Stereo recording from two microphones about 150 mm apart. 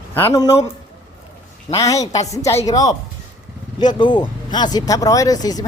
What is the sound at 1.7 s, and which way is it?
Speech, 20° left (ahead or behind).